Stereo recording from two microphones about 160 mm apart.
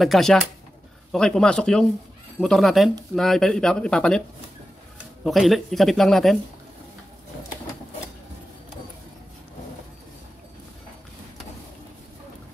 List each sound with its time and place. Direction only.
0.0 s speech: centre (ahead or behind)
5.2 s speech: centre (ahead or behind)